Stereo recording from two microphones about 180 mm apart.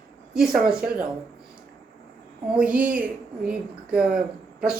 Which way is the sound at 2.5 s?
5° right (ahead or behind).